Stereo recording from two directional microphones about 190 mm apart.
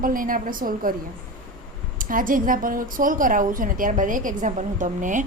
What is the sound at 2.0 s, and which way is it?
Speech, 45° right (ahead or behind).